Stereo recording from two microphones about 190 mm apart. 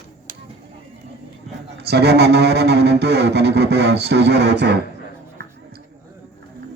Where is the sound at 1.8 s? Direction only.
60° right (ahead or behind).